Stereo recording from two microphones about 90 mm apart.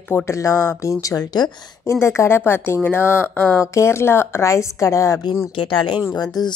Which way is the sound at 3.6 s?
30° left (ahead or behind).